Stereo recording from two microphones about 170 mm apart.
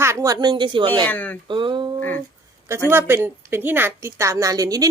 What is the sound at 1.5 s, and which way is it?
Speech, 30° right (ahead or behind).